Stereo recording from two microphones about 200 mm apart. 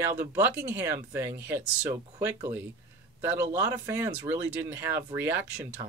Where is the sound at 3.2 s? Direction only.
10° right (ahead or behind).